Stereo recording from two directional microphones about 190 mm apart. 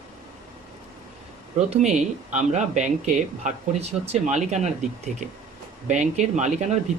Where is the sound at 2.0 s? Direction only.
40° right (ahead or behind).